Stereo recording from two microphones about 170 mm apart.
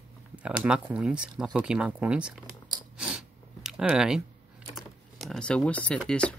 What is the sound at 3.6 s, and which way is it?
Speech, 5° right (ahead or behind).